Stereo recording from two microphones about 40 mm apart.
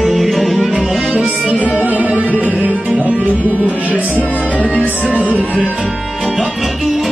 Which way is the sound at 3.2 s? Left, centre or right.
Right.